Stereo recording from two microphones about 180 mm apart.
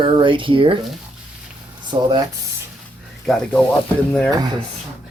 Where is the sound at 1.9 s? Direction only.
20° right (ahead or behind).